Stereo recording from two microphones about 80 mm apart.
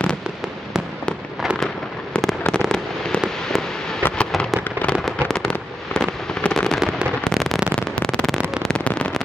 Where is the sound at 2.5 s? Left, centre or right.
Centre.